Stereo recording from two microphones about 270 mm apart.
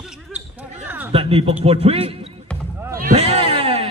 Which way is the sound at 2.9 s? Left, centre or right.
Right.